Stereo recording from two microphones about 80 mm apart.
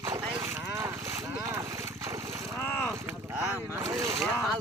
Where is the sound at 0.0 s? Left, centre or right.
Right.